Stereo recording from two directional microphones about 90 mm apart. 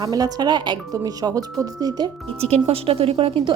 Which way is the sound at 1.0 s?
45° right (ahead or behind).